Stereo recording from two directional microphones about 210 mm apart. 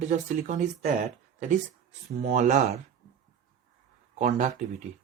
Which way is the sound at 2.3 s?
35° right (ahead or behind).